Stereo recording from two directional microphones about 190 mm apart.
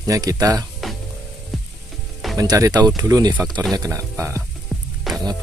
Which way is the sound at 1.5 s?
Centre (ahead or behind).